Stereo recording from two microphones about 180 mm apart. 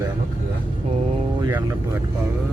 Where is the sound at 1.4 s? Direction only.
15° right (ahead or behind).